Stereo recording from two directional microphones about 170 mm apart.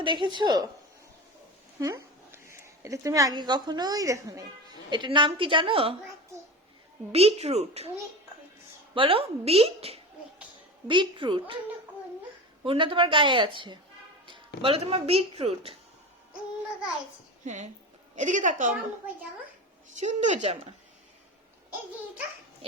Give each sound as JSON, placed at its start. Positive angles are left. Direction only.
{"t": 0.0, "sound": "speech", "side_deg": -30}
{"t": 1.8, "sound": "speech", "side_deg": -20}
{"t": 7.1, "sound": "speech", "side_deg": -35}
{"t": 9.0, "sound": "speech", "side_deg": -30}
{"t": 12.6, "sound": "speech", "side_deg": -30}
{"t": 17.4, "sound": "a woman's voice", "side_deg": -45}
{"t": 20.0, "sound": "speech", "side_deg": -45}